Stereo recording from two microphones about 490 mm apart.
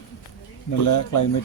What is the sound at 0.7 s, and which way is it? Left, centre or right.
Speech, left.